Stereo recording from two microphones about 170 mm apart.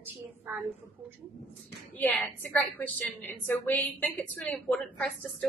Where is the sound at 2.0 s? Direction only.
10° left (ahead or behind).